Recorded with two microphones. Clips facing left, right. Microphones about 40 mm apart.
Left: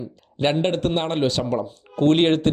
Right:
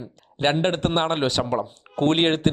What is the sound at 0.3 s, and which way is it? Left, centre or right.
A man's voice, right.